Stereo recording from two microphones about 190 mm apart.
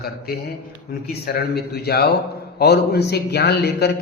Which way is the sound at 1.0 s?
55° left (ahead or behind).